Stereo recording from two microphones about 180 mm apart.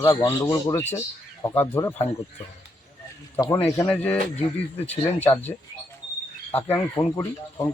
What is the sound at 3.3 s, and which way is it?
Speech, 20° left (ahead or behind).